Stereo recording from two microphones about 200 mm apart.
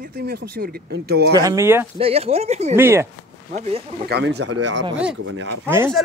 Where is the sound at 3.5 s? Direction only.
35° right (ahead or behind).